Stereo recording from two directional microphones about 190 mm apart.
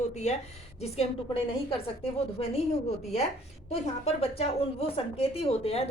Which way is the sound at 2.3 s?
35° left (ahead or behind).